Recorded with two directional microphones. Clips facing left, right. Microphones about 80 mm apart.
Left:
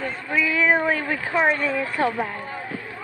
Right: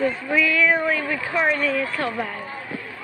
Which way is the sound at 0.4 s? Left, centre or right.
Left.